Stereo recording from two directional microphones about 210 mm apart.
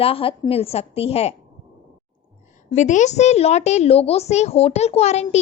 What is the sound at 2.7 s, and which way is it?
A woman's voice, 35° left (ahead or behind).